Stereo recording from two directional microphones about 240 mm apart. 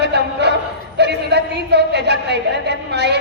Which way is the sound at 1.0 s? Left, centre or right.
Right.